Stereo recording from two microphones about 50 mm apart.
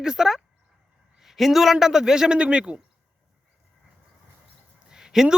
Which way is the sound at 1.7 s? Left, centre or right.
Centre.